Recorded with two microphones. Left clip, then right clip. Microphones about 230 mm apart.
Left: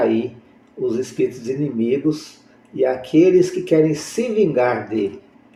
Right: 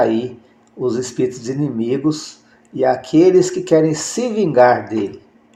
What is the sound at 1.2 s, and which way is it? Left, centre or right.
Speech, right.